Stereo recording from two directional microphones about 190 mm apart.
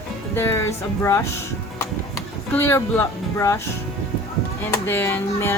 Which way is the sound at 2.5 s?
15° left (ahead or behind).